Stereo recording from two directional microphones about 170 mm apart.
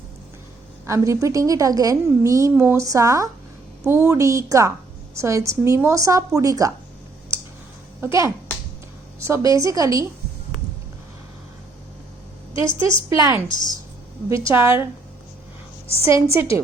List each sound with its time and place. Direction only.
0.9 s a woman's voice: 15° right (ahead or behind)
8.0 s a woman's voice: 15° right (ahead or behind)
12.6 s a woman's voice: 30° left (ahead or behind)
13.1 s a woman's voice: 20° right (ahead or behind)
13.5 s a woman's voice: 25° left (ahead or behind)
14.3 s speech: 15° right (ahead or behind)
15.9 s a woman's voice: 35° left (ahead or behind)